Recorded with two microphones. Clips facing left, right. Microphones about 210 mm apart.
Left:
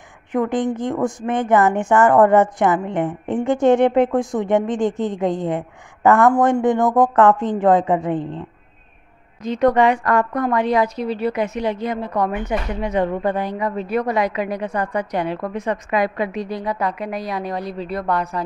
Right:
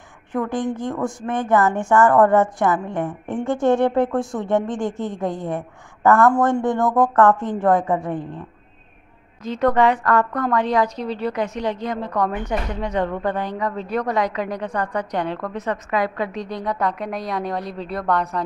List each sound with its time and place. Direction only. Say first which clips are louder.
0.3 s a woman's voice: left 3 dB; 20° left (ahead or behind); by 18.4 s centre (ahead or behind)